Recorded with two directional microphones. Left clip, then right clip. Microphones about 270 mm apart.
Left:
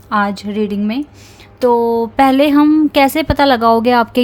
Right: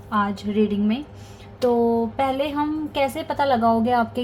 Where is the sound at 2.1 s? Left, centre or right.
Left.